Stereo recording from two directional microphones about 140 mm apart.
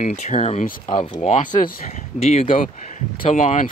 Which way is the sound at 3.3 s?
60° left (ahead or behind).